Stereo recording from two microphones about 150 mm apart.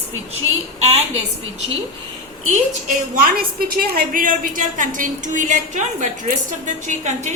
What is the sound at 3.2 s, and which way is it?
A woman's voice, 70° right (ahead or behind).